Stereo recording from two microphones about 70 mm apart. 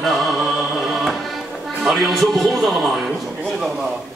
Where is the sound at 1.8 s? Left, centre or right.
Centre.